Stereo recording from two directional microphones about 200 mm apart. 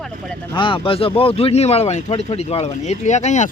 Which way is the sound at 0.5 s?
25° left (ahead or behind).